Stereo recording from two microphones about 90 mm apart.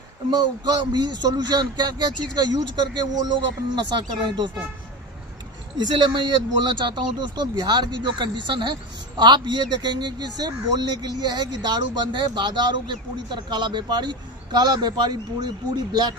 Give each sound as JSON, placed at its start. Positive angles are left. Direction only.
{"t": 0.9, "sound": "speech", "side_deg": -50}
{"t": 5.9, "sound": "speech", "side_deg": -65}